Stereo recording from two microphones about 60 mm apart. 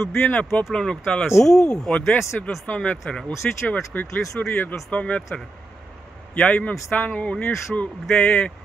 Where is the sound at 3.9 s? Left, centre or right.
Left.